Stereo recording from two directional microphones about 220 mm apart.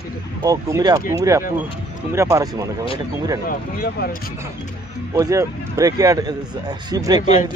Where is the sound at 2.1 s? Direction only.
15° right (ahead or behind).